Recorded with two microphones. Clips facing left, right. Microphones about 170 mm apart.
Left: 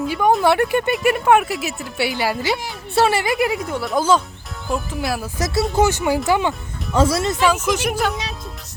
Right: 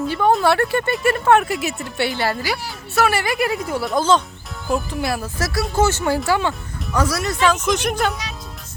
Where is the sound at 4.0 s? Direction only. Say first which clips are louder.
Left 1 dB; 10° left (ahead or behind).